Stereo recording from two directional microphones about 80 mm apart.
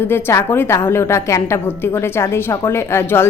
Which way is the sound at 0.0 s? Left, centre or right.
Left.